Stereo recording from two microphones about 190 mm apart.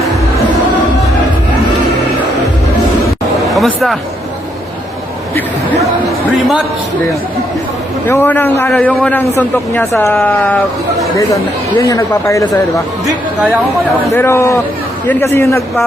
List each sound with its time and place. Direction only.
3.5 s speech: centre (ahead or behind)
6.2 s a man's voice: 5° right (ahead or behind)
8.0 s a man's voice: 10° left (ahead or behind)
11.8 s a man's voice: 20° left (ahead or behind)
14.1 s a man's voice: 15° left (ahead or behind)